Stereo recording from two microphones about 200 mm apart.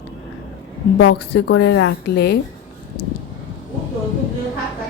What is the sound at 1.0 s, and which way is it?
A woman's voice, 60° left (ahead or behind).